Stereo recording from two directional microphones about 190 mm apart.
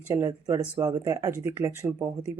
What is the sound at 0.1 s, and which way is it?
Speech, 15° right (ahead or behind).